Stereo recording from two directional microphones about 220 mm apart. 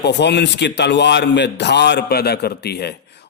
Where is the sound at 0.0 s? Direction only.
50° left (ahead or behind).